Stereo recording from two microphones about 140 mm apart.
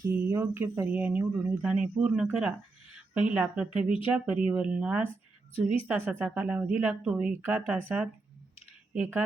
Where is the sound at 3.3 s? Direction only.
5° right (ahead or behind).